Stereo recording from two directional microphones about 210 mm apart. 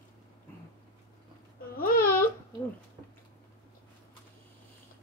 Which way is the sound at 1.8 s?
45° left (ahead or behind).